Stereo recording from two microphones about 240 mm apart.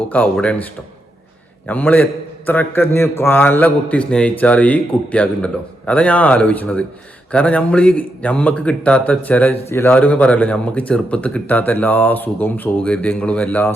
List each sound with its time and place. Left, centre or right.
0.1 s a man's voice: centre